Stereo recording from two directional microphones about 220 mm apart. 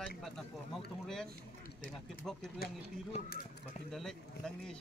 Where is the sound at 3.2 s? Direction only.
40° left (ahead or behind).